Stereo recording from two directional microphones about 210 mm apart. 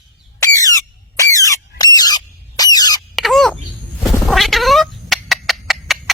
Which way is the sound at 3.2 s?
Centre (ahead or behind).